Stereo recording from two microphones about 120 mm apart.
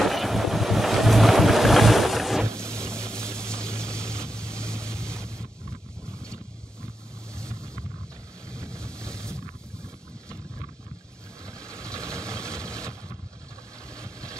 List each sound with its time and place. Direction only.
0.0 s boat: centre (ahead or behind)
2.6 s vehicle: 5° left (ahead or behind)
7.3 s vehicle: 5° left (ahead or behind)
9.0 s boat: 5° left (ahead or behind)
11.4 s vehicle: 25° right (ahead or behind)
13.9 s vehicle: 25° right (ahead or behind)